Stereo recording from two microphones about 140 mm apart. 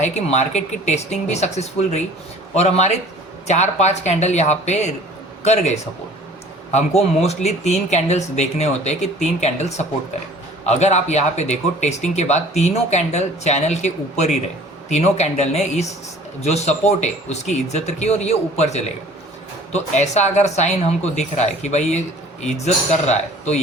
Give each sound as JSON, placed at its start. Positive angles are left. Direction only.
{"t": 0.0, "sound": "a man's voice", "side_deg": 55}